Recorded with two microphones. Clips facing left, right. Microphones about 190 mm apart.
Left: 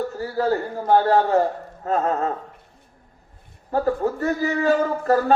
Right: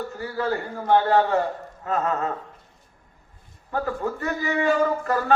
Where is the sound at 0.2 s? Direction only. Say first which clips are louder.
Left 4 dB; 40° left (ahead or behind).